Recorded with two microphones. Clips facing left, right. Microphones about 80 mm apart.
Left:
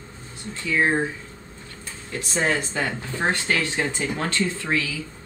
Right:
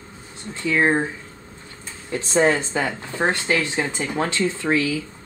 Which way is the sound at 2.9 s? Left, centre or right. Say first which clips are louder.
Right 2 dB; centre.